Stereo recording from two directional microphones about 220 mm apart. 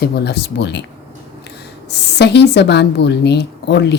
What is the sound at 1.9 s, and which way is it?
Speech, 50° left (ahead or behind).